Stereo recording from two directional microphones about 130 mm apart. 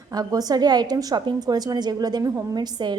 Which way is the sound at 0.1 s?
30° right (ahead or behind).